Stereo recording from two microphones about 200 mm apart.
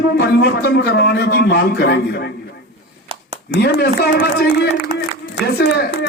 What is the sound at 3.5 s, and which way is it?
A man's voice, 55° left (ahead or behind).